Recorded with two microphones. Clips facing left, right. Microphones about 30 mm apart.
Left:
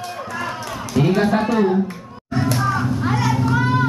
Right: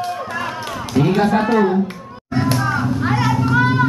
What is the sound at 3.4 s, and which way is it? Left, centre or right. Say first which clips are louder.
Children playing: right 3 dB; right.